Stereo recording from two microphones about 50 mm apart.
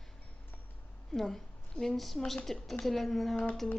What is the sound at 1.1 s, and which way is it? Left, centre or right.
A woman's voice, centre.